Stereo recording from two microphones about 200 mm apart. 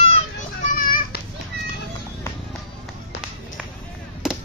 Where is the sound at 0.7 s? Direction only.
45° left (ahead or behind).